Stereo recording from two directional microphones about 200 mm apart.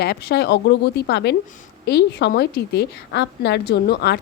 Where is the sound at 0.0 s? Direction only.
55° left (ahead or behind).